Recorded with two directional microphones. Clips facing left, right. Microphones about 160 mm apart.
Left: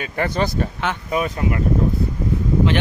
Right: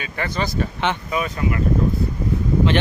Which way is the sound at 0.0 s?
50° left (ahead or behind).